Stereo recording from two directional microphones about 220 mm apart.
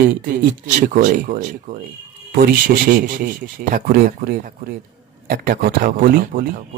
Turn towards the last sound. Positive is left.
turn(degrees=-40)  # may be behind; listen again after turning